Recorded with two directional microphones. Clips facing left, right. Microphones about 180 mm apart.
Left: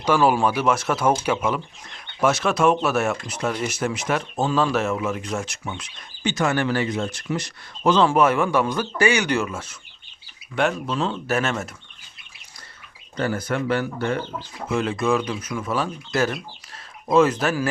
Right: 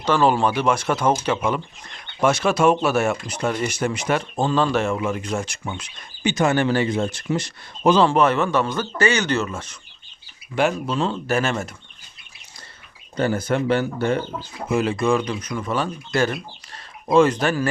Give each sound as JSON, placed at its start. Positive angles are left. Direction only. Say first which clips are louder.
{"t": 0.0, "sound": "speech", "louder": "even", "side_deg": 10}
{"t": 6.2, "sound": "speech", "louder": "right 3 dB", "side_deg": -20}
{"t": 8.0, "sound": "speech", "louder": "even", "side_deg": 10}
{"t": 13.1, "sound": "speech", "louder": "right 3 dB", "side_deg": -25}
{"t": 14.7, "sound": "speech", "louder": "right 2 dB", "side_deg": -5}